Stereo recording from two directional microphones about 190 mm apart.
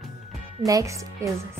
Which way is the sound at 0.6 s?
15° right (ahead or behind).